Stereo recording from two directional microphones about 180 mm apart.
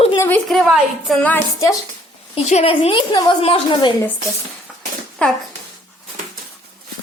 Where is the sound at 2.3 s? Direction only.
35° left (ahead or behind).